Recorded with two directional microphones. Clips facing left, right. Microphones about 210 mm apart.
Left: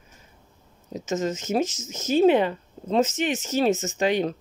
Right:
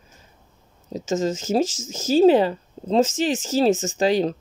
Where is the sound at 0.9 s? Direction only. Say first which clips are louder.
Right 3 dB; 30° right (ahead or behind).